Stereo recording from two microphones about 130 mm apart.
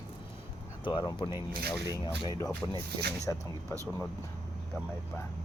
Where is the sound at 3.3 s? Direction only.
20° left (ahead or behind).